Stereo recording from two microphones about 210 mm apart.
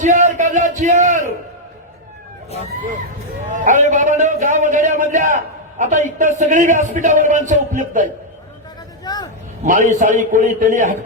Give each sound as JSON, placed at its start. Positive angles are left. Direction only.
{"t": 0.0, "sound": "a man's voice", "side_deg": -35}
{"t": 3.5, "sound": "a man's voice", "side_deg": -35}
{"t": 9.0, "sound": "speech", "side_deg": 20}
{"t": 9.6, "sound": "a man's voice", "side_deg": -35}